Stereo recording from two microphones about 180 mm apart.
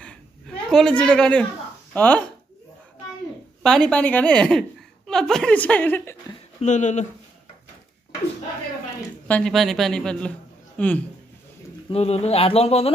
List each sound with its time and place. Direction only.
0.7 s a woman's voice: 5° left (ahead or behind)
3.6 s a woman's voice: 5° left (ahead or behind)
6.6 s speech: 40° left (ahead or behind)
9.3 s a woman's voice: 5° left (ahead or behind)
11.9 s speech: 35° left (ahead or behind)